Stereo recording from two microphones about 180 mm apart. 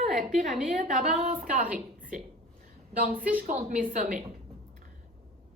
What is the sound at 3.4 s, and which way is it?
Speech, 45° right (ahead or behind).